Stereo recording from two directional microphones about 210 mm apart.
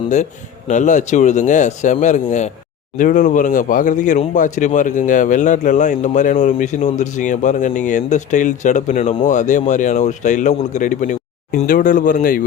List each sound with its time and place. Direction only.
0.7 s speech: 35° left (ahead or behind)